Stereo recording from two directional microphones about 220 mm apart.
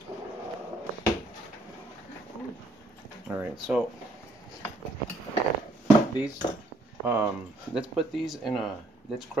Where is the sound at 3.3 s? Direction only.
5° right (ahead or behind).